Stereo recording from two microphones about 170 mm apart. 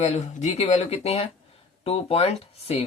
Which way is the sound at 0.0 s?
40° left (ahead or behind).